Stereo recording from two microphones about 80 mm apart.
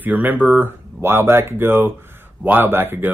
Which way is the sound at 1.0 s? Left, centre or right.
Right.